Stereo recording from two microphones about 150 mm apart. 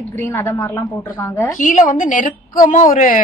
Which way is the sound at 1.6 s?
60° left (ahead or behind).